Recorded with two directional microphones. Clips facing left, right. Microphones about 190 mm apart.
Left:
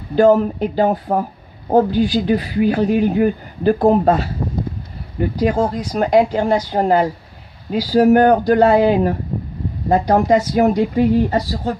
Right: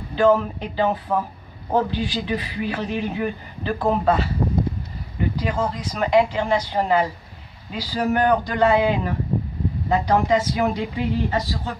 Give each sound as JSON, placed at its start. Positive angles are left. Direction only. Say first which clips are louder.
{"t": 0.1, "sound": "speech", "louder": "left 5 dB", "side_deg": 45}
{"t": 5.3, "sound": "speech", "louder": "left 9 dB", "side_deg": 45}